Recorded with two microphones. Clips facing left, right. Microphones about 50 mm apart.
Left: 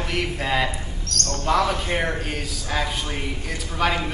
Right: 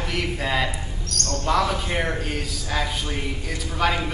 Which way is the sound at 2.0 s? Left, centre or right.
Centre.